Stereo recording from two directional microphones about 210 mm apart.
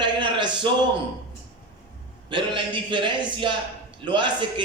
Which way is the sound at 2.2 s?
25° right (ahead or behind).